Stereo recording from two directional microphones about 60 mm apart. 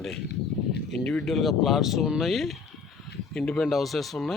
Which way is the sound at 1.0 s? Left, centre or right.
Centre.